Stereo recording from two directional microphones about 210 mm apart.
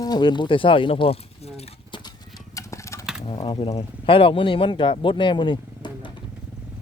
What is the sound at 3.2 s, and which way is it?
Speech, 20° left (ahead or behind).